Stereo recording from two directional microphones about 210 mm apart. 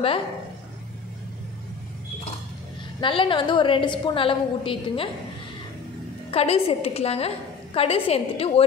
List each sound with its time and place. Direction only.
3.0 s a woman's voice: 25° left (ahead or behind)
6.3 s a woman's voice: 30° left (ahead or behind)